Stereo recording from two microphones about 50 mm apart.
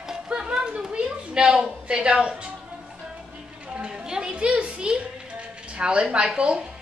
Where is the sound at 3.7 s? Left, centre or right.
Centre.